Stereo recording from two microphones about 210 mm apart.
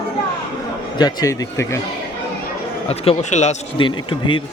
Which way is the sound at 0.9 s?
15° left (ahead or behind).